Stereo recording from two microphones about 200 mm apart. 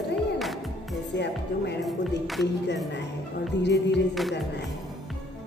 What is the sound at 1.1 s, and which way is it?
Speech, 60° left (ahead or behind).